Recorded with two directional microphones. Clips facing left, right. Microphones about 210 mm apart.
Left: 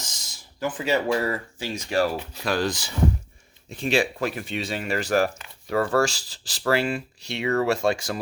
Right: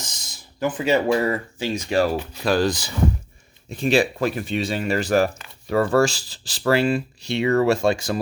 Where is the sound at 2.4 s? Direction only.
35° right (ahead or behind).